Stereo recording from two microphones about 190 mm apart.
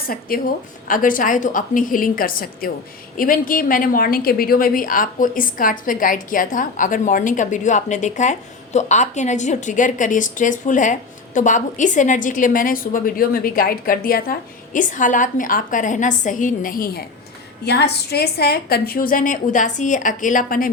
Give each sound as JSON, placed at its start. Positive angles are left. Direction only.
{"t": 0.3, "sound": "a woman's voice", "side_deg": 50}